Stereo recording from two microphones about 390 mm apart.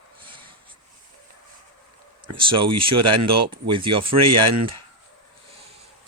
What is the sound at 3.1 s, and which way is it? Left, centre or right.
Speech, right.